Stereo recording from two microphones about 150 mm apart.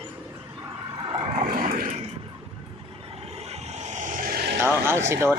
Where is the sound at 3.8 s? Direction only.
55° right (ahead or behind); by 4.6 s 90° right.